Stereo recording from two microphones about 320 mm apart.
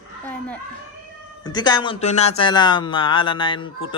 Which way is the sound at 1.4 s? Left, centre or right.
Centre.